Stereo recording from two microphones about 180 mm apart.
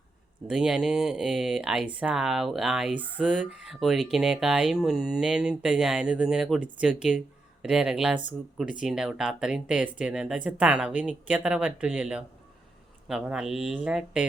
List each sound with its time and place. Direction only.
0.4 s speech: 5° right (ahead or behind)